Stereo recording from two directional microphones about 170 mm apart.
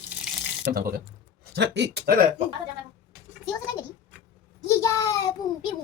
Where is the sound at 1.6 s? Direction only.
85° right.